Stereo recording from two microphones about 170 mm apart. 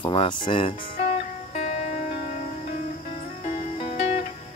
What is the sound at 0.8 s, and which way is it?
Music, 50° left (ahead or behind).